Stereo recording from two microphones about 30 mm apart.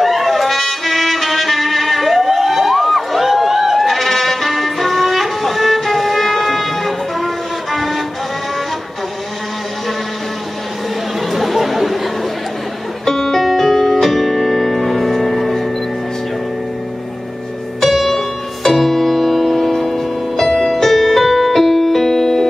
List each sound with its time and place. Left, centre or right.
0.0 s music: centre
11.3 s chatter: centre
13.0 s music: centre
13.4 s music: centre
17.8 s music: centre